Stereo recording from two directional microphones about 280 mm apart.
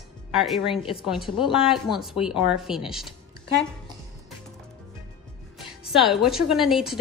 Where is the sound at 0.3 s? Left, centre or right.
Centre.